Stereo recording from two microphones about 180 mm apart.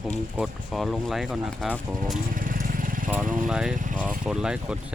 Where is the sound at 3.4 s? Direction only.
5° right (ahead or behind).